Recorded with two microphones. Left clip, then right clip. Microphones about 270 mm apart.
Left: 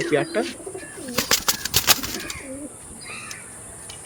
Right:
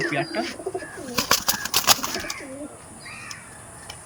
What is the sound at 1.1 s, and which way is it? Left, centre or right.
Bird, centre.